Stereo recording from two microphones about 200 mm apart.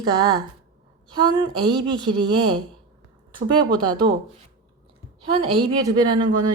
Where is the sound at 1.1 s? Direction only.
20° right (ahead or behind).